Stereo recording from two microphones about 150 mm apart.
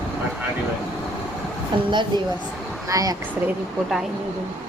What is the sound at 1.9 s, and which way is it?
A child's voice, 30° right (ahead or behind).